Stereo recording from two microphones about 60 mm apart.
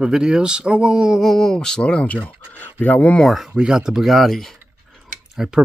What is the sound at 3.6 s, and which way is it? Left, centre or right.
Speech, centre.